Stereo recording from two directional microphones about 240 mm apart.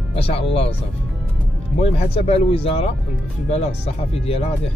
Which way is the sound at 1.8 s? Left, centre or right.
Left.